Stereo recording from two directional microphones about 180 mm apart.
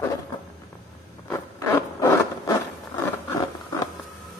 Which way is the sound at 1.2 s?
15° left (ahead or behind).